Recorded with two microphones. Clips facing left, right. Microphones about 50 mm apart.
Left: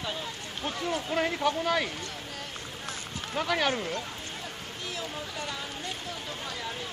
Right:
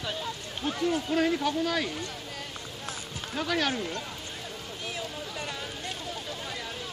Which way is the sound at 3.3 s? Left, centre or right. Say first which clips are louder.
Left 1 dB; centre.